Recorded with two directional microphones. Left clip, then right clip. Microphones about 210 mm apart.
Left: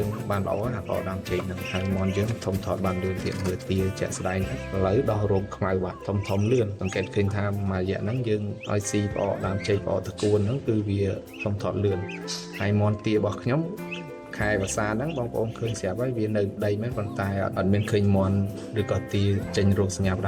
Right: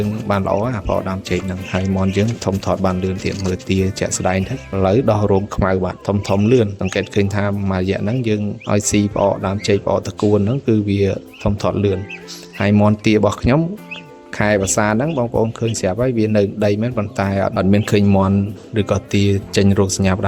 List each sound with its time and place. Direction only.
0.3 s speech: 55° right (ahead or behind)